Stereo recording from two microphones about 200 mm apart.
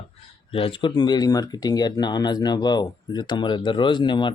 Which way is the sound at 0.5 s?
25° left (ahead or behind).